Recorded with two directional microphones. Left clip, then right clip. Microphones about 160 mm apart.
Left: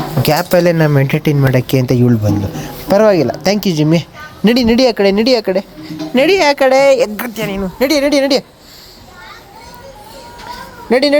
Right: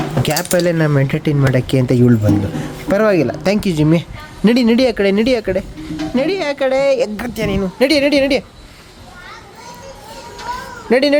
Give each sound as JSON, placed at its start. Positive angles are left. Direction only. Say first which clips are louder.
{"t": 0.2, "sound": "speech", "louder": "left 5 dB", "side_deg": 15}
{"t": 6.1, "sound": "speech", "louder": "left 8 dB", "side_deg": 20}
{"t": 7.0, "sound": "a woman's voice", "louder": "left 3 dB", "side_deg": -5}
{"t": 7.4, "sound": "a woman's voice", "louder": "right 1 dB", "side_deg": -20}
{"t": 10.8, "sound": "speech", "louder": "left 2 dB", "side_deg": 5}